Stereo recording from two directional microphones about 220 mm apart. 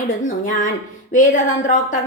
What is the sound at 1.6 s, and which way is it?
Speech, 35° left (ahead or behind).